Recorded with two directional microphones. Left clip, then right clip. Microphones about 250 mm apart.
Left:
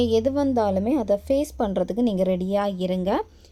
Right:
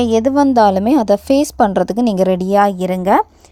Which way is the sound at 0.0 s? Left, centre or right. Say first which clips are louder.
Right 8 dB; right.